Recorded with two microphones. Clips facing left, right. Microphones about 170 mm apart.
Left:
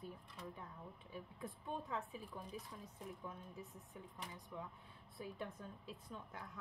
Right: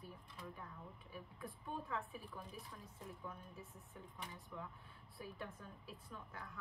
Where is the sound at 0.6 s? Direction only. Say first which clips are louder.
Left 1 dB; 20° left (ahead or behind).